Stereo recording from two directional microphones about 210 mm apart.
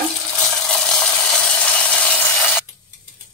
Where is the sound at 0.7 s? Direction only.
5° left (ahead or behind).